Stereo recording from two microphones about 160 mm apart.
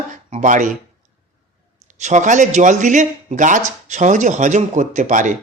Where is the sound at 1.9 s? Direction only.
50° right (ahead or behind).